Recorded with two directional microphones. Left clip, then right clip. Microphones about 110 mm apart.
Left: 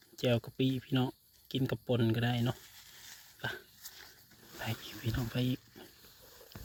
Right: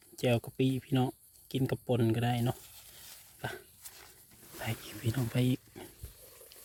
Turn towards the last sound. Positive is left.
turn(degrees=-35)  # may be behind; listen again after turning